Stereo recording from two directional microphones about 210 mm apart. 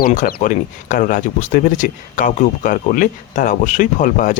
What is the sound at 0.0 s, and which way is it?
Speech, 40° left (ahead or behind).